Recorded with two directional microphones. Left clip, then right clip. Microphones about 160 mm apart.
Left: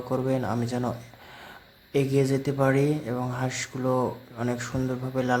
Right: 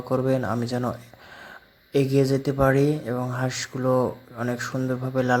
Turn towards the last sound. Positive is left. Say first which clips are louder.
# right 3 dB
turn(degrees=-20)  # may be behind; listen again after turning